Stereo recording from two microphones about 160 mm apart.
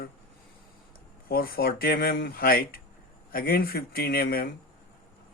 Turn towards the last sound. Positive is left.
turn(degrees=65)  # may be behind; listen again after turning